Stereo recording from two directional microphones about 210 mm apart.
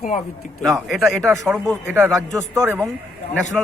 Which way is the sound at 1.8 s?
10° right (ahead or behind).